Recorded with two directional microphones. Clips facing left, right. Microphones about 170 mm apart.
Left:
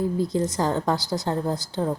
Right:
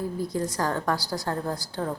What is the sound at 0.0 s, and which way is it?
Speech, 25° left (ahead or behind).